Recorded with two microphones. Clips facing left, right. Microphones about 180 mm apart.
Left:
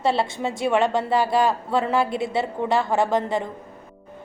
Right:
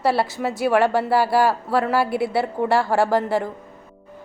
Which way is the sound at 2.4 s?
20° left (ahead or behind).